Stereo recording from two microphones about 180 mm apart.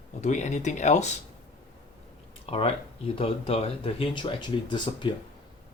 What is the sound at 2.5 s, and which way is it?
Speech, 30° left (ahead or behind).